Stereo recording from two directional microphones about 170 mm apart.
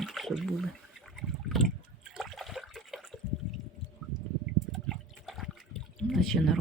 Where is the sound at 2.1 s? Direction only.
Centre (ahead or behind).